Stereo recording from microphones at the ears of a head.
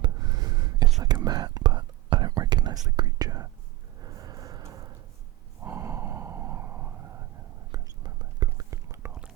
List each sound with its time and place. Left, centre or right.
0.0 s whispering: right
4.0 s a sound: right
5.5 s gasp: right